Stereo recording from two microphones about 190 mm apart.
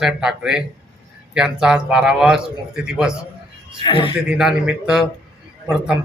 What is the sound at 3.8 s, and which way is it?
Speech, 25° left (ahead or behind).